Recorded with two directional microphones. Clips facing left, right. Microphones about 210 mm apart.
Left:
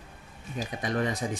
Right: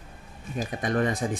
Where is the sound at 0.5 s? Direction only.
50° right (ahead or behind).